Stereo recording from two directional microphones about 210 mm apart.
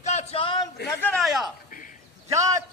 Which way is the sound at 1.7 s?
40° left (ahead or behind).